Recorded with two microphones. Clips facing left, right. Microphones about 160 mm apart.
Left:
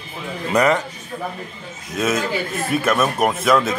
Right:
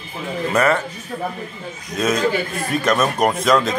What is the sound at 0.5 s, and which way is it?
Speech, 15° left (ahead or behind).